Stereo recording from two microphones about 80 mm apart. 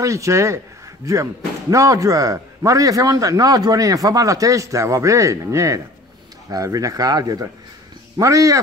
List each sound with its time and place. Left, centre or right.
0.0 s a man's voice: right